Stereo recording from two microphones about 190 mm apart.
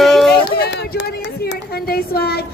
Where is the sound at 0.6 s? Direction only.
60° left (ahead or behind).